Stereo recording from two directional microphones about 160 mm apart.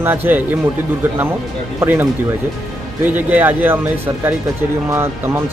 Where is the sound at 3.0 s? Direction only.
10° right (ahead or behind).